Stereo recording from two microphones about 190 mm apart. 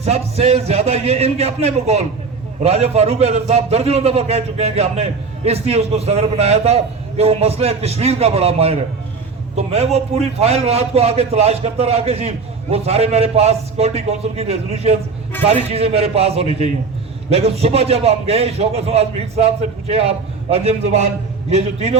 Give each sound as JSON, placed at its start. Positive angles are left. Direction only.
{"t": 0.0, "sound": "a man's voice", "side_deg": -35}